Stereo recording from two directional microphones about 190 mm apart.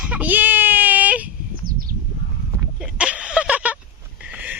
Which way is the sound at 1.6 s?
50° right (ahead or behind).